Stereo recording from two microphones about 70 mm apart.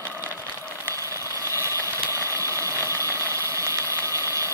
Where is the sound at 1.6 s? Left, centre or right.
Left.